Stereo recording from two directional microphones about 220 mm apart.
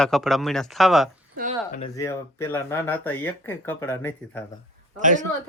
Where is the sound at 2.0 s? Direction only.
15° left (ahead or behind).